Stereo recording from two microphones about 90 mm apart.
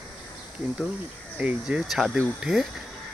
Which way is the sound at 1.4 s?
10° right (ahead or behind).